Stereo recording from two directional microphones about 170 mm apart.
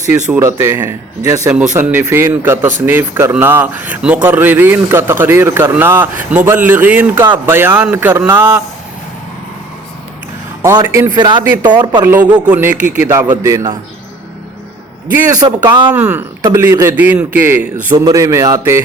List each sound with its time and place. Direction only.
0.3 s speech: 15° right (ahead or behind)
10.6 s speech: 20° right (ahead or behind)
11.1 s a man's voice: 25° right (ahead or behind)
12.0 s speech: 10° right (ahead or behind)
15.3 s a man's voice: 25° right (ahead or behind)
15.9 s speech: 10° right (ahead or behind)
17.9 s a man's voice: 20° right (ahead or behind)